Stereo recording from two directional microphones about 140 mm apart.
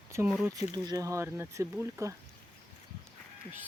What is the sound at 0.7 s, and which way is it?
Speech, 25° right (ahead or behind).